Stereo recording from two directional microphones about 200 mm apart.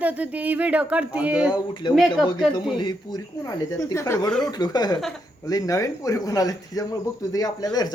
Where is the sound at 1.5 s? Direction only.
20° left (ahead or behind).